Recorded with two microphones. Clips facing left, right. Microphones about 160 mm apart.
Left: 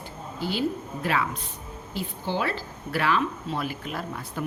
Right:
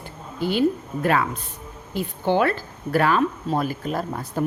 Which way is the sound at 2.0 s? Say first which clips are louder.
Right 8 dB; 55° right (ahead or behind).